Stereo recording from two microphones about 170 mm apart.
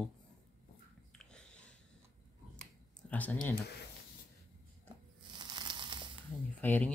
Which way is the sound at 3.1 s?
10° left (ahead or behind).